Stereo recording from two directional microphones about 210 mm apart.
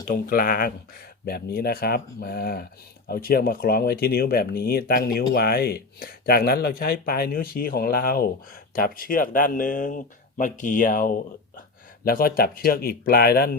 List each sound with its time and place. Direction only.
0.1 s speech: 40° left (ahead or behind)